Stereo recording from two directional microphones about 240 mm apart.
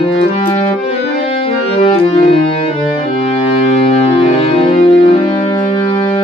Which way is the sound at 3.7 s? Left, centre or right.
Left.